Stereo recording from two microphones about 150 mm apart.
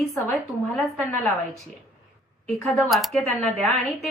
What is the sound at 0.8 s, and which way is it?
Speech, 5° left (ahead or behind).